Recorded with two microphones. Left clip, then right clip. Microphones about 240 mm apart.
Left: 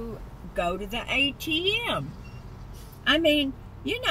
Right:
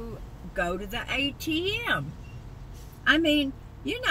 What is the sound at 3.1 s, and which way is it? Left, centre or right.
Speech, left.